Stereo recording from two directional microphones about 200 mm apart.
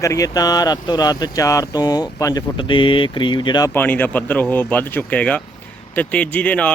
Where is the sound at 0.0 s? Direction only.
15° left (ahead or behind).